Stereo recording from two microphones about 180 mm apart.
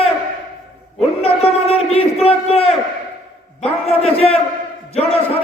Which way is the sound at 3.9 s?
35° left (ahead or behind).